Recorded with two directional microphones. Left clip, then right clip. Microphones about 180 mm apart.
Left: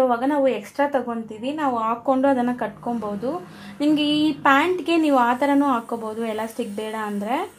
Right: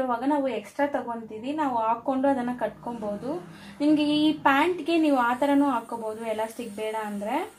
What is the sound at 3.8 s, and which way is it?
A woman's voice, 45° left (ahead or behind).